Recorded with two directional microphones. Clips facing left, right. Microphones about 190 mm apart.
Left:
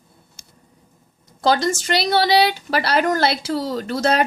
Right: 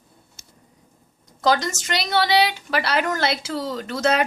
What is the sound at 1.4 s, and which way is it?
A woman's voice, 30° left (ahead or behind).